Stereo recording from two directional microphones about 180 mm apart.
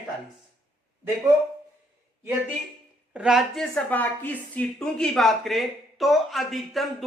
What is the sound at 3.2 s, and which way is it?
A woman's voice, centre (ahead or behind).